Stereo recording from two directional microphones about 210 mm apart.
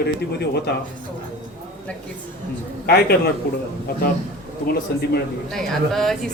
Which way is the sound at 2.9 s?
50° left (ahead or behind).